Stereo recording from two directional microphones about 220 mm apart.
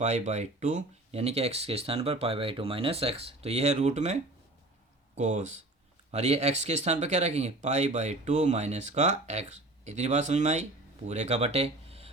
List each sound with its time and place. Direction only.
0.0 s speech: 30° right (ahead or behind)